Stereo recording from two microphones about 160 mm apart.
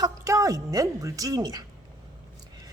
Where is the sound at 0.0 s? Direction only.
20° right (ahead or behind).